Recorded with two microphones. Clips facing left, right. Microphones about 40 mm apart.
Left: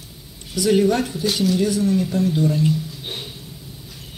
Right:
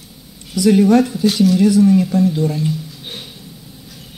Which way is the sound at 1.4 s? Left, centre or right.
Right.